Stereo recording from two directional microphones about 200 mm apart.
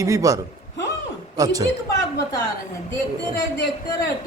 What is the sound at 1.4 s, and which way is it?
Speech, 20° right (ahead or behind).